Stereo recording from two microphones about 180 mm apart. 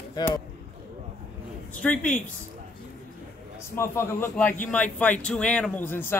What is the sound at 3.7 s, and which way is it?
Speech, 15° left (ahead or behind).